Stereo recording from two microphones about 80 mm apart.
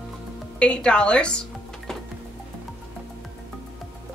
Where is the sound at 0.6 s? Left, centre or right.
Centre.